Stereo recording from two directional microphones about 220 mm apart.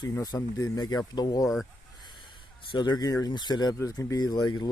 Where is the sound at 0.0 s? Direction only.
15° left (ahead or behind).